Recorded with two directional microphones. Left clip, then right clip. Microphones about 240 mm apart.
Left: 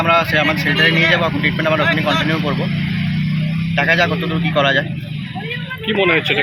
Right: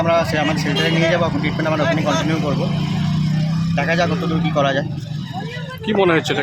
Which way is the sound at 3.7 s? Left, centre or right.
Centre.